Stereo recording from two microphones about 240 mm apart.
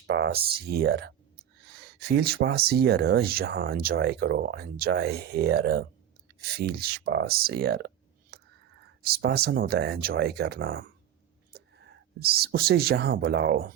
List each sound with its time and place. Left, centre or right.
0.1 s speech: right
8.3 s whispering: right
9.0 s speech: right